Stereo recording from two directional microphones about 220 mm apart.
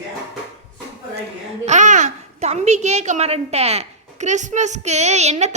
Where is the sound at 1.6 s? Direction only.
35° right (ahead or behind).